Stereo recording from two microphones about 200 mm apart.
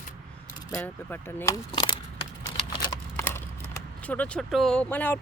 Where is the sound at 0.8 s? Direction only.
10° left (ahead or behind).